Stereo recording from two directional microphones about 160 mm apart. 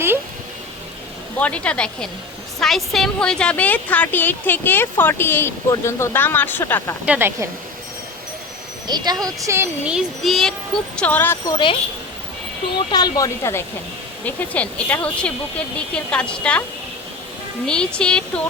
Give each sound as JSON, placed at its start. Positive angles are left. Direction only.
{"t": 1.4, "sound": "a woman's voice", "side_deg": 10}
{"t": 7.0, "sound": "speech", "side_deg": -10}
{"t": 8.9, "sound": "a sound", "side_deg": -25}
{"t": 9.8, "sound": "child singing", "side_deg": 0}
{"t": 10.9, "sound": "a woman's voice", "side_deg": 10}
{"t": 11.4, "sound": "speech", "side_deg": 30}
{"t": 12.9, "sound": "a woman's voice", "side_deg": 25}
{"t": 17.7, "sound": "child singing", "side_deg": 5}